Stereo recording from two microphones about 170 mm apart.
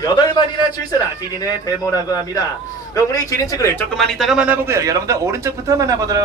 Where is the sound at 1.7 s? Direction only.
20° left (ahead or behind).